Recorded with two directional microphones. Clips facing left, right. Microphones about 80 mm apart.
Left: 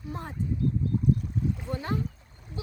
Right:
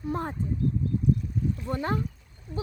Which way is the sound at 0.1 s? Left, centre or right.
Right.